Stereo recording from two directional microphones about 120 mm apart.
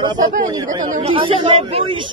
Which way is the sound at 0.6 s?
30° right (ahead or behind).